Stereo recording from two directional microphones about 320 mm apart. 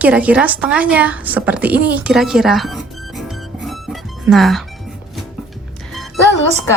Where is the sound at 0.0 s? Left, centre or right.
Centre.